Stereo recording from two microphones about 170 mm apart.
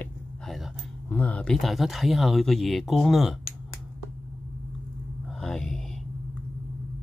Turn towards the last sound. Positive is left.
turn(degrees=5)  # may be behind; listen again after turning